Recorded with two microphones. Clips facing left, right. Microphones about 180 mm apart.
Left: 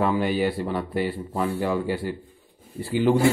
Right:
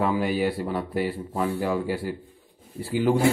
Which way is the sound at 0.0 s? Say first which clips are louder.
Left 1 dB; 5° right (ahead or behind).